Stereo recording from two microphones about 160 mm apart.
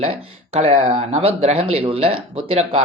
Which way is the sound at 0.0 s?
40° right (ahead or behind).